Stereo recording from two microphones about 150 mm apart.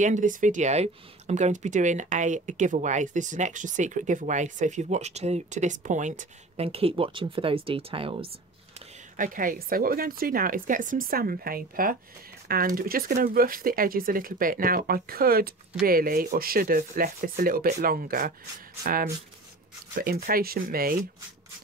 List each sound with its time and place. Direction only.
0.0 s speech: 55° right (ahead or behind); by 8.3 s 35° right (ahead or behind)
9.1 s speech: 65° right (ahead or behind); by 15.5 s 90° right
15.8 s speech: 75° right (ahead or behind)
20.0 s speech: 85° right